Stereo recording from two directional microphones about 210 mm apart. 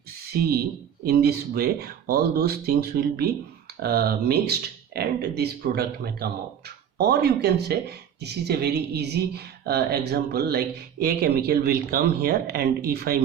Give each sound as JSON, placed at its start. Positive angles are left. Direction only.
{"t": 0.3, "sound": "speech", "side_deg": -45}